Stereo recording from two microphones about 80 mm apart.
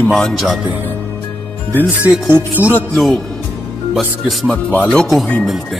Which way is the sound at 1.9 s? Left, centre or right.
Centre.